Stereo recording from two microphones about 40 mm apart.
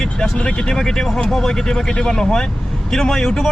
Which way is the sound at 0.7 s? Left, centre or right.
Centre.